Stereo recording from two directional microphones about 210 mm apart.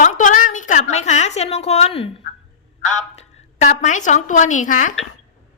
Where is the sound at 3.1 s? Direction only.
35° left (ahead or behind).